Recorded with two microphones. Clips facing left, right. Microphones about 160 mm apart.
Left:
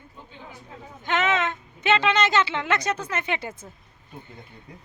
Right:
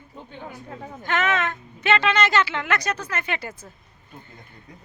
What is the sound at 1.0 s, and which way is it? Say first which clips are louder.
Speech: even; 20° left (ahead or behind).